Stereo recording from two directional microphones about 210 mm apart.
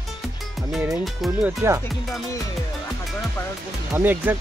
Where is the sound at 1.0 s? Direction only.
Centre (ahead or behind).